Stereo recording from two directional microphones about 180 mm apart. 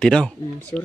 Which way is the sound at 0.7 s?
20° left (ahead or behind).